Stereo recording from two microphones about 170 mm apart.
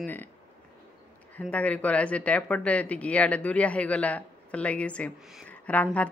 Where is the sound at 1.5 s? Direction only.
10° left (ahead or behind).